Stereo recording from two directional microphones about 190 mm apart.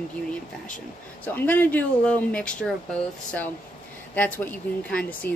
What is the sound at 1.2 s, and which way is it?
Speech, 10° left (ahead or behind).